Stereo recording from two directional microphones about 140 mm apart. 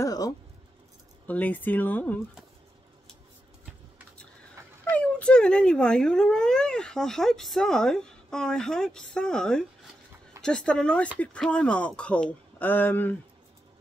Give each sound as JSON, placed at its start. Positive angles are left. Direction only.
{"t": 0.0, "sound": "a sound", "side_deg": 25}
{"t": 1.2, "sound": "speech", "side_deg": 10}
{"t": 4.9, "sound": "speech", "side_deg": 10}